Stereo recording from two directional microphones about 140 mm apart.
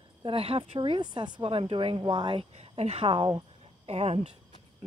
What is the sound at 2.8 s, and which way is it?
Speech, 45° right (ahead or behind).